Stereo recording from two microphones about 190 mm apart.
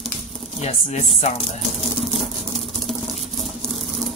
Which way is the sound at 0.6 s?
35° left (ahead or behind).